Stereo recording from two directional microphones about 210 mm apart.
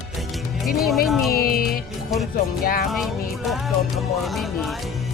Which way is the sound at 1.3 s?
45° left (ahead or behind).